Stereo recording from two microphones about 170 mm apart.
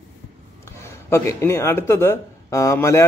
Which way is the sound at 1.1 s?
15° left (ahead or behind).